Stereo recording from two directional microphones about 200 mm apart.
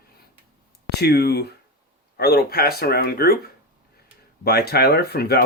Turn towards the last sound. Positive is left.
turn(degrees=55)  # may be behind; listen again after turning